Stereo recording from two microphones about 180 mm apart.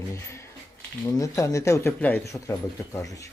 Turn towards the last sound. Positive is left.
turn(degrees=20)  # may be behind; listen again after turning